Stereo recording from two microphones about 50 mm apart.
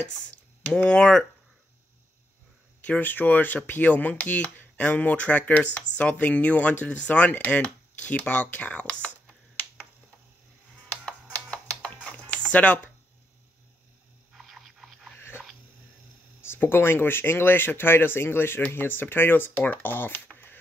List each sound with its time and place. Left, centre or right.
0.7 s speech: left
2.8 s speech: left
11.5 s a sound: left
12.1 s music: left
12.5 s speech: left
14.3 s a sound: centre
15.1 s dog: left
16.3 s speech: left